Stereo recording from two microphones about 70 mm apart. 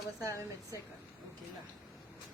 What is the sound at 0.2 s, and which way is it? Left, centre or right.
Speech, right.